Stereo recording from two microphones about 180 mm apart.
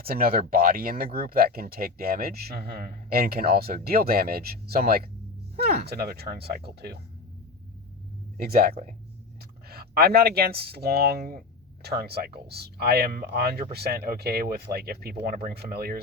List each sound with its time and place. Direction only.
0.0 s speech: 55° right (ahead or behind)
8.4 s speech: 55° right (ahead or behind)
8.7 s speech: 40° right (ahead or behind)
9.6 s speech: 60° right (ahead or behind)